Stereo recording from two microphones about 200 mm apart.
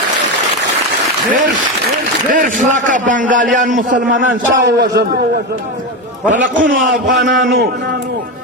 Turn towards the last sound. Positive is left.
turn(degrees=-45)  # may be behind; listen again after turning